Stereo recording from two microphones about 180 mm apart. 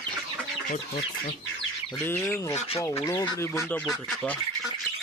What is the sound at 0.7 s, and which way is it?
Speech, 30° left (ahead or behind).